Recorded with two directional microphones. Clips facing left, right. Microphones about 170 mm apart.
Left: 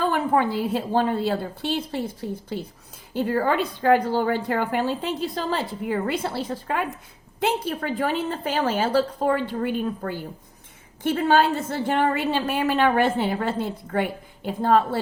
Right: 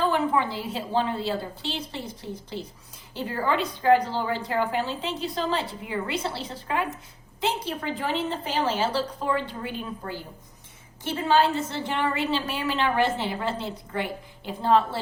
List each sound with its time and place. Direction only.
0.0 s a woman's voice: 50° left (ahead or behind)
3.1 s a woman's voice: 50° left (ahead or behind)